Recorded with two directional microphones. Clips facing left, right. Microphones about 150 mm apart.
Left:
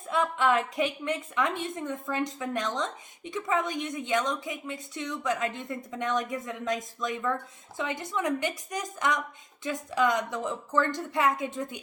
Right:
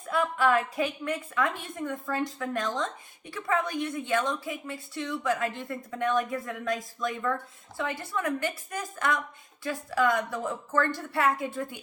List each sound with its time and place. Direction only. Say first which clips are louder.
0.1 s a woman's voice: right 1 dB; 20° left (ahead or behind)